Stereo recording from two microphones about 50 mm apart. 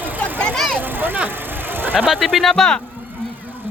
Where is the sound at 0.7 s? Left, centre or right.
Right.